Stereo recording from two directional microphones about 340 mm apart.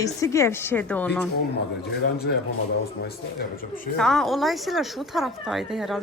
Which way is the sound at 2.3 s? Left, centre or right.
Left.